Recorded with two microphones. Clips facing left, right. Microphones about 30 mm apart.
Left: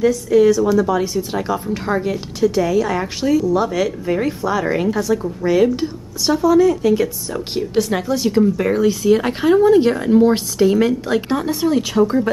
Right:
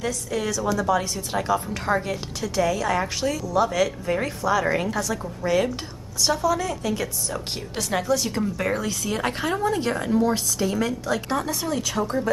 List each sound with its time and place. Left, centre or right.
0.0 s speech: centre